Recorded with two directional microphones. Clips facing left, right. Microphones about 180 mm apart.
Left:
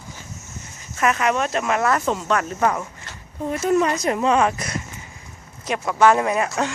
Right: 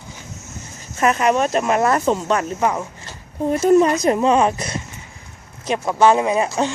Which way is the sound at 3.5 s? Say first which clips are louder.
Right 5 dB; 35° right (ahead or behind).